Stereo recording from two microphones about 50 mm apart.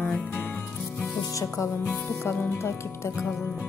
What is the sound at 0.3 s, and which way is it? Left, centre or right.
Music, left.